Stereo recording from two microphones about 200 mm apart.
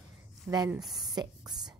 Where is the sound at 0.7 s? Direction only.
Centre (ahead or behind).